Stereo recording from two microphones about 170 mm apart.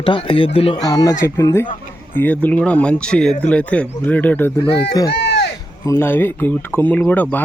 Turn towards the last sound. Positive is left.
turn(degrees=10)  # may be behind; listen again after turning